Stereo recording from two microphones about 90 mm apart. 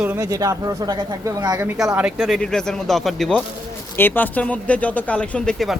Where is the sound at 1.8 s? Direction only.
5° right (ahead or behind).